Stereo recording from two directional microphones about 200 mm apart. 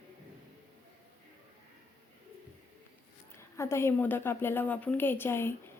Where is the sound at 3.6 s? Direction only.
15° left (ahead or behind).